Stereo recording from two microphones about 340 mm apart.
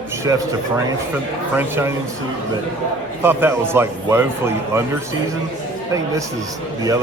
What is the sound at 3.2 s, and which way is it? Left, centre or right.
A man's voice, centre.